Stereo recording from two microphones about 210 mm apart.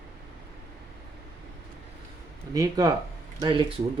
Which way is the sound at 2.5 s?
15° right (ahead or behind).